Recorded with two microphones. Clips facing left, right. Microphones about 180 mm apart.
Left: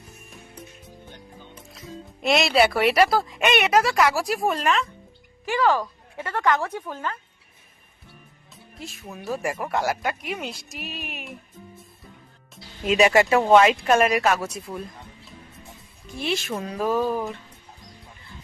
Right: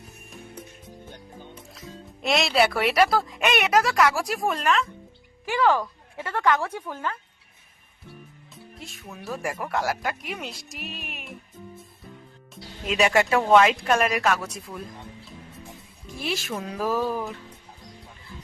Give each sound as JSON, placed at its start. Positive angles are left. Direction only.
{"t": 2.2, "sound": "a woman's voice", "side_deg": 0}
{"t": 5.6, "sound": "speech", "side_deg": 10}
{"t": 8.8, "sound": "a woman's voice", "side_deg": 0}
{"t": 12.9, "sound": "a woman's voice", "side_deg": 0}
{"t": 14.3, "sound": "speech", "side_deg": 30}
{"t": 16.2, "sound": "a woman's voice", "side_deg": 0}